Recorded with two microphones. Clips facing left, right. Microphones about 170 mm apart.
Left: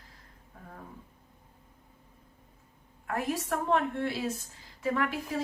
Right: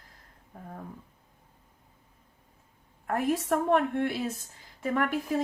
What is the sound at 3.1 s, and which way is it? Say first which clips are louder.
A woman's voice: right 4 dB; 55° right (ahead or behind).